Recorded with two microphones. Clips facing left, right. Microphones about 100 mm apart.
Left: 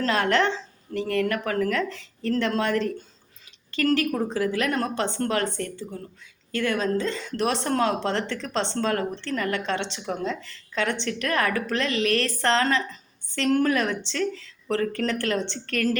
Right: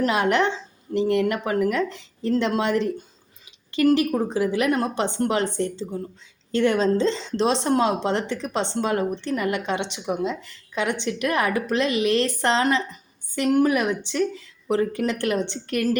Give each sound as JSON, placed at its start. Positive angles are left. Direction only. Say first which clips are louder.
{"t": 0.0, "sound": "speech", "louder": "right 2 dB", "side_deg": -15}